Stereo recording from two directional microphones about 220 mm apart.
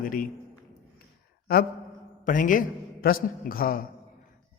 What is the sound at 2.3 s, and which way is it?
Speech, 35° left (ahead or behind).